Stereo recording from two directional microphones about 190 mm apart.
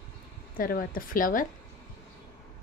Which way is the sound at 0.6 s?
50° left (ahead or behind).